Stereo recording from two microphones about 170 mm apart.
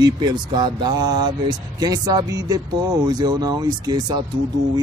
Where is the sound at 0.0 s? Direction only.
25° right (ahead or behind).